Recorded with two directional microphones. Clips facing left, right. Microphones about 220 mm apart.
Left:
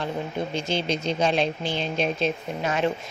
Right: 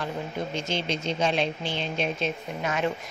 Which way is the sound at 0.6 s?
35° left (ahead or behind).